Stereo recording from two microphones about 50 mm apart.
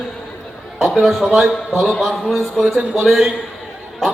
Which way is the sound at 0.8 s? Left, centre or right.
Centre.